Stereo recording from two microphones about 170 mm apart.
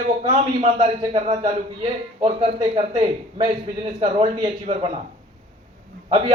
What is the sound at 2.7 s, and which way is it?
Speech, 35° right (ahead or behind).